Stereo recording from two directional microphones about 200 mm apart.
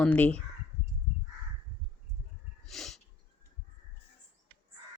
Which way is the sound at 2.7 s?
Centre (ahead or behind).